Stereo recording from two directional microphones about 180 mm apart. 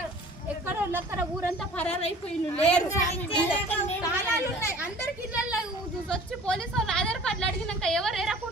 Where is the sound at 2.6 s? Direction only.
5° left (ahead or behind).